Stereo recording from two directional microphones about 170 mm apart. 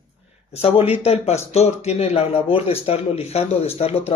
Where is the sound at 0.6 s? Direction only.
35° left (ahead or behind).